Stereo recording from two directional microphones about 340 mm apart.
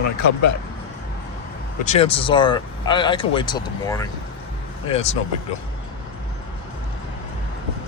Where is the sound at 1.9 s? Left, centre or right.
Centre.